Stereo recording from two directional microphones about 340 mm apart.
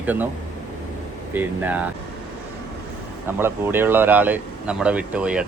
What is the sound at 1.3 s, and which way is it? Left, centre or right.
Speech, centre.